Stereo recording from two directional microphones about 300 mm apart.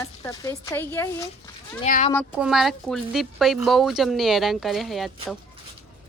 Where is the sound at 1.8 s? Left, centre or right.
Left.